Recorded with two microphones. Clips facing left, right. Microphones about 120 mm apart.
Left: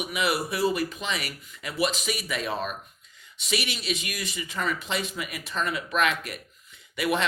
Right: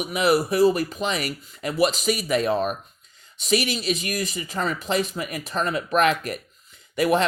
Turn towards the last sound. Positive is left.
turn(degrees=-40)  # may be behind; listen again after turning